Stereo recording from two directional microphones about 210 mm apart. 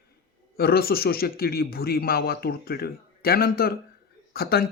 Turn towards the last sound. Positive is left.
turn(degrees=45)  # may be behind; listen again after turning